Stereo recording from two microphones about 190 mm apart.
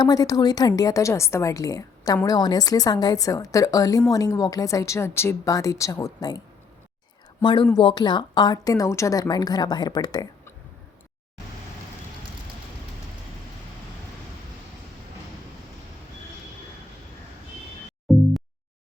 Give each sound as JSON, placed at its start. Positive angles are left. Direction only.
{"t": 0.0, "sound": "a woman's voice", "side_deg": 20}
{"t": 7.4, "sound": "a woman's voice", "side_deg": 25}
{"t": 18.1, "sound": "a sound", "side_deg": 0}